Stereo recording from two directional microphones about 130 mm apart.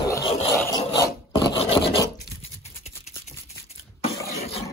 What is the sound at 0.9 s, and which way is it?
Filing, 35° left (ahead or behind).